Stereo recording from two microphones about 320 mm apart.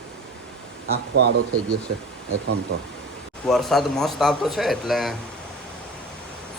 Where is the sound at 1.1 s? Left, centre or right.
Right.